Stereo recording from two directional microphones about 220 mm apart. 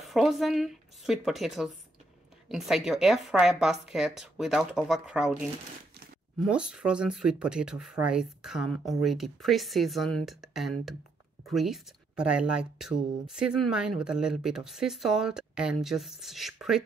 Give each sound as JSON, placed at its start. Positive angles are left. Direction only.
{"t": 0.0, "sound": "speech", "side_deg": 0}
{"t": 6.4, "sound": "speech", "side_deg": -5}